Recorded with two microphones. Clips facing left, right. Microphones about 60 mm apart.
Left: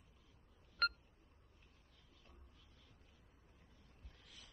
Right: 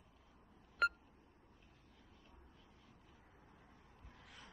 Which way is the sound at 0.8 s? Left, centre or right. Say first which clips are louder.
Right 3 dB; centre.